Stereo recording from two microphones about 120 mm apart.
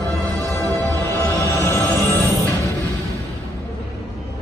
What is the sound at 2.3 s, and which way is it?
Music, 25° right (ahead or behind).